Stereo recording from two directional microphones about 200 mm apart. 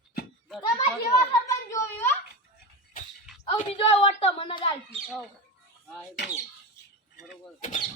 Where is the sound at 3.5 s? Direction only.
30° left (ahead or behind).